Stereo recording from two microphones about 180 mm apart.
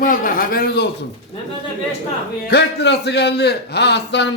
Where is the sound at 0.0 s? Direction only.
50° left (ahead or behind).